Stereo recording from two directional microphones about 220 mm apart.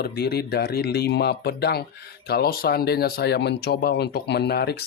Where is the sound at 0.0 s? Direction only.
45° left (ahead or behind).